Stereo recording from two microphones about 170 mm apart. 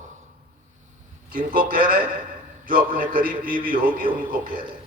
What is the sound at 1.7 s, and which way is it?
A man's voice, 60° right (ahead or behind).